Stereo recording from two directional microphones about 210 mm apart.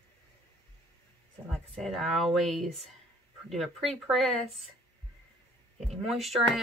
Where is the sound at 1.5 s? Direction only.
Centre (ahead or behind).